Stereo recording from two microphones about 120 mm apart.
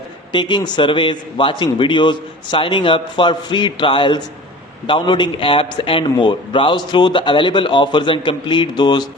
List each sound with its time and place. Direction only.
0.3 s a man's voice: 40° left (ahead or behind)